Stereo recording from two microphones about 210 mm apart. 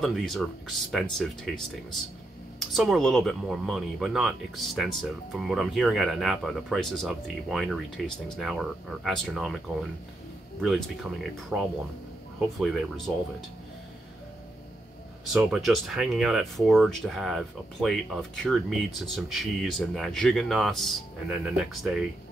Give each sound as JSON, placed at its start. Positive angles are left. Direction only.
{"t": 0.0, "sound": "speech", "side_deg": 0}
{"t": 10.6, "sound": "speech", "side_deg": 0}
{"t": 15.3, "sound": "speech", "side_deg": 0}